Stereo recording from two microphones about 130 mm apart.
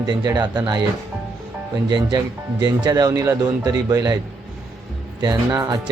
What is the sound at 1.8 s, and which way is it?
A man's voice, 35° right (ahead or behind).